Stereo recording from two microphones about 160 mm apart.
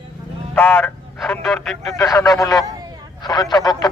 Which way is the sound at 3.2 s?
25° left (ahead or behind).